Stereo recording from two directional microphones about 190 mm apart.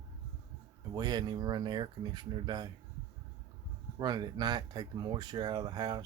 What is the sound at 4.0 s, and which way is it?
Speech, 20° right (ahead or behind).